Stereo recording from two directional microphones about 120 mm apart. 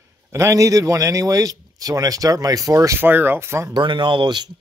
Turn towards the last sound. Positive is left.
turn(degrees=-40)  # may be behind; listen again after turning